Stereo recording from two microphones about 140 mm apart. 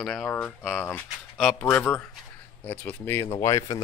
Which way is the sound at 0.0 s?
Centre (ahead or behind).